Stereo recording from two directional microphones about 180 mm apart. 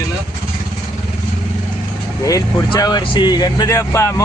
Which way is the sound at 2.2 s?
20° left (ahead or behind).